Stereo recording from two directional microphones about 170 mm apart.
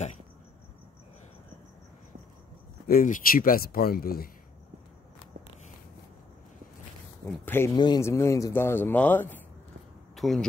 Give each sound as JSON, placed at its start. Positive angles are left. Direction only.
{"t": 2.9, "sound": "speech", "side_deg": 55}
{"t": 7.4, "sound": "speech", "side_deg": 15}
{"t": 7.7, "sound": "speech", "side_deg": 25}